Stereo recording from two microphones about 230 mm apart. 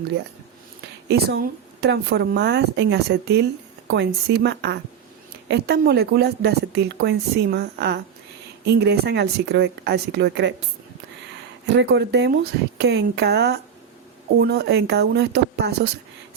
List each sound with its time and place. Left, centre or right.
1.0 s a woman's voice: right
11.6 s a woman's voice: right